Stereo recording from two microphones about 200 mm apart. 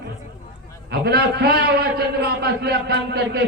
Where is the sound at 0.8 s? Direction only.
55° right (ahead or behind).